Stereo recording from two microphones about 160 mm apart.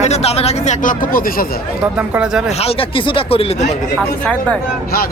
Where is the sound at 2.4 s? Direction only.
35° left (ahead or behind).